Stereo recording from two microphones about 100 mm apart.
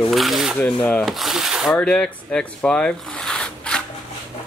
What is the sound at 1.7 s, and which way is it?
Speech, 10° left (ahead or behind).